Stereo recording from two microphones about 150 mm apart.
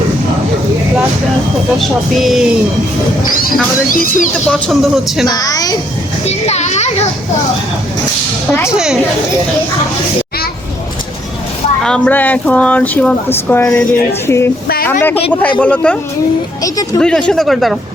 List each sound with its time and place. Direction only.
1.8 s speech: centre (ahead or behind)
4.4 s speech: 5° left (ahead or behind)
5.2 s a woman's voice: 25° left (ahead or behind)
6.2 s children playing: 45° left (ahead or behind)
8.7 s speech: 5° right (ahead or behind)
11.8 s speech: 5° left (ahead or behind)
16.6 s a woman's voice: 25° left (ahead or behind)
17.0 s speech: 5° left (ahead or behind)